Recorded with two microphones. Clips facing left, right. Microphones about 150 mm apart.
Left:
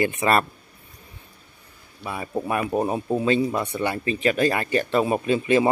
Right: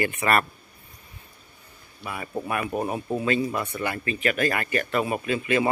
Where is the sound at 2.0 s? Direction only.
20° left (ahead or behind).